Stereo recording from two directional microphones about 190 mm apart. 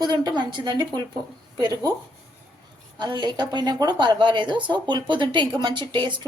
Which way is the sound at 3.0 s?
25° right (ahead or behind).